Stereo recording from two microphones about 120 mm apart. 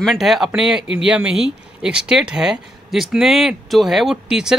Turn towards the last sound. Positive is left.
turn(degrees=-5)  # may be behind; listen again after turning